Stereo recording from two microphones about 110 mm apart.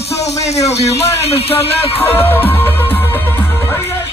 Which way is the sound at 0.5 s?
80° left.